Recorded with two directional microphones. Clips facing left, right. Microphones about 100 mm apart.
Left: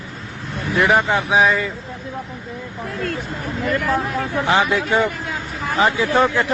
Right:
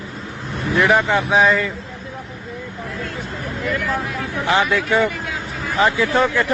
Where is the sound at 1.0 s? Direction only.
15° left (ahead or behind).